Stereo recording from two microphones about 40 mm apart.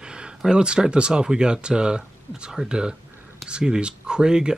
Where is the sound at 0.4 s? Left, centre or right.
Right.